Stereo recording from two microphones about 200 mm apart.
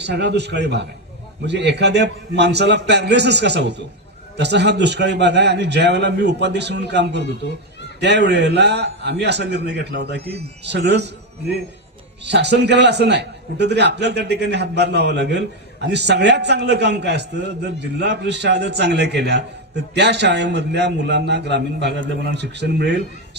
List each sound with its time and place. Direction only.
0.0 s a man's voice: 60° right (ahead or behind)
7.2 s speech: 60° left (ahead or behind)
8.0 s a man's voice: 60° right (ahead or behind)
12.2 s a man's voice: 60° right (ahead or behind)